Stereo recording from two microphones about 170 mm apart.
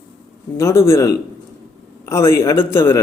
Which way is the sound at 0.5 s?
15° left (ahead or behind).